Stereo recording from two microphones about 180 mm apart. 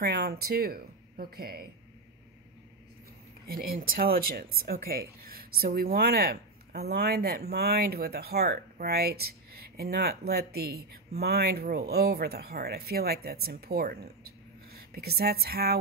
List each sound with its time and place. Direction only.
0.0 s speech: 60° right (ahead or behind)
3.4 s speech: 55° right (ahead or behind)